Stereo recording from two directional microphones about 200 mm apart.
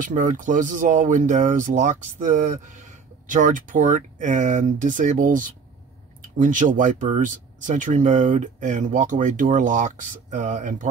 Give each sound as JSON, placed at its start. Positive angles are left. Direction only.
{"t": 0.0, "sound": "speech", "side_deg": -40}